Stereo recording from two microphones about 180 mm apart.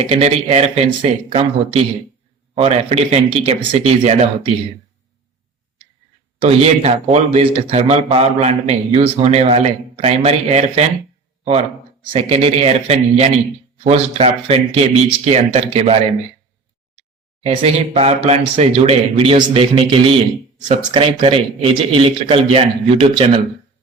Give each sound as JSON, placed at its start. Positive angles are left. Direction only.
{"t": 0.1, "sound": "a man's voice", "side_deg": -35}
{"t": 6.4, "sound": "a man's voice", "side_deg": -35}
{"t": 12.1, "sound": "a man's voice", "side_deg": -35}
{"t": 17.4, "sound": "a man's voice", "side_deg": -35}